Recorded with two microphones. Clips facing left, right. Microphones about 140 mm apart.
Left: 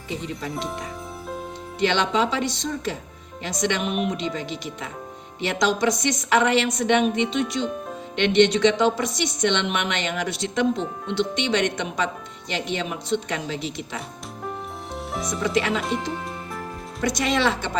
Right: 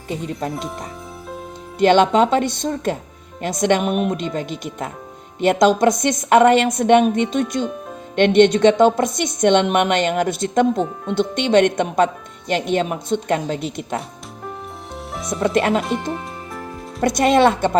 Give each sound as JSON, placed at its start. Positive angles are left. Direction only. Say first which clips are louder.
{"t": 1.8, "sound": "a woman's voice", "louder": "right 8 dB", "side_deg": -50}
{"t": 7.6, "sound": "music", "louder": "right 2 dB", "side_deg": 0}
{"t": 8.1, "sound": "a woman's voice", "louder": "right 5 dB", "side_deg": -50}
{"t": 14.9, "sound": "music", "louder": "right 3 dB", "side_deg": 0}
{"t": 15.4, "sound": "a woman's voice", "louder": "right 6 dB", "side_deg": -55}
{"t": 15.8, "sound": "speech", "louder": "right 3 dB", "side_deg": 0}
{"t": 17.0, "sound": "a woman's voice", "louder": "right 8 dB", "side_deg": -55}